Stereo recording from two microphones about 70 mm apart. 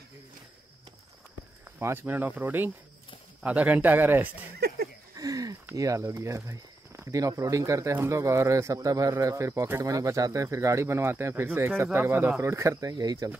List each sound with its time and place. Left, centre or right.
1.8 s speech: right
5.1 s a sound: right
5.8 s speech: right
9.1 s speech: right
12.4 s speech: right
12.9 s speech: right